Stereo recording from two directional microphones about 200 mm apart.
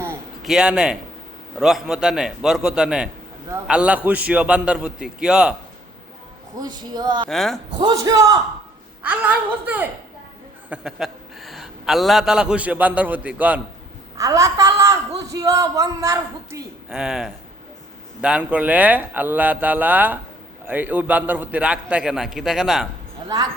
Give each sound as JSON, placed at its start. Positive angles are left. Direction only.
{"t": 0.4, "sound": "a man's voice", "side_deg": -5}
{"t": 6.6, "sound": "speech", "side_deg": -20}
{"t": 7.3, "sound": "a man's voice", "side_deg": 0}
{"t": 7.8, "sound": "speech", "side_deg": -20}
{"t": 9.0, "sound": "a man's voice", "side_deg": -5}
{"t": 16.9, "sound": "a man's voice", "side_deg": -5}